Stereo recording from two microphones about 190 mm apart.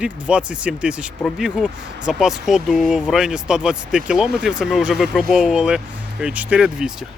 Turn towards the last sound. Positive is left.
turn(degrees=-5)  # may be behind; listen again after turning